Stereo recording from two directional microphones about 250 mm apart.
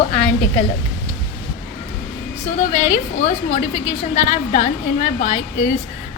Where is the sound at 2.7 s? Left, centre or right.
Left.